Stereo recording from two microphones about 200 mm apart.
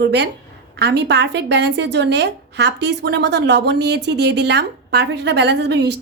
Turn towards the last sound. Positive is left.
turn(degrees=-60)  # may be behind; listen again after turning